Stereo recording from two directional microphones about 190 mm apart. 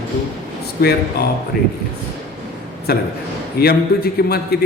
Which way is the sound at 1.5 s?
55° left (ahead or behind).